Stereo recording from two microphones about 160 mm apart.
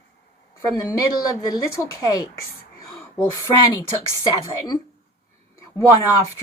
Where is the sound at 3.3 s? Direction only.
20° left (ahead or behind).